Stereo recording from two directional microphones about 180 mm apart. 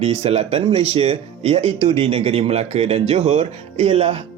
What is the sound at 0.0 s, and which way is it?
Speech, 35° right (ahead or behind).